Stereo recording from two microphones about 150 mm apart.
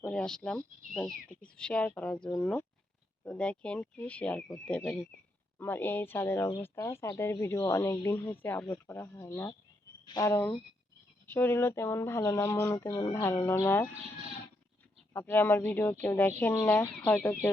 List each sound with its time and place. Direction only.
0.1 s speech: 5° left (ahead or behind)
15.1 s speech: 15° left (ahead or behind)